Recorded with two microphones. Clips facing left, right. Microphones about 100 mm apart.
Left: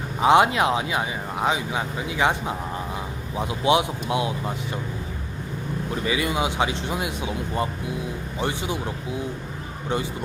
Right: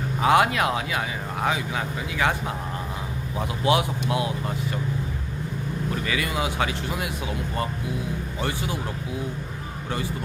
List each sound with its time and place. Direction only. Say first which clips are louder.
0.2 s speech: left 3 dB; 20° left (ahead or behind)
5.9 s speech: left 4 dB; 20° left (ahead or behind)